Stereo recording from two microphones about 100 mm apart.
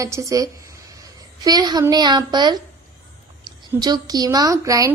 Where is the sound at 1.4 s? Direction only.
45° right (ahead or behind).